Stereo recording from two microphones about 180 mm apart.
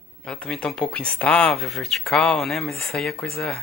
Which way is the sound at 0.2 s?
5° left (ahead or behind).